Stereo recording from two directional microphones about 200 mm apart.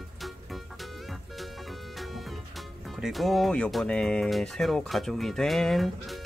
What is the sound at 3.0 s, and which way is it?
Speech, centre (ahead or behind).